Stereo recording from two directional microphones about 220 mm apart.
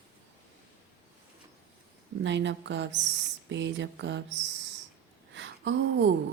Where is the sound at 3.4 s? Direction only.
55° right (ahead or behind).